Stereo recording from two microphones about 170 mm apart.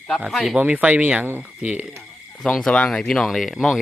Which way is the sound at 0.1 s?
Centre (ahead or behind).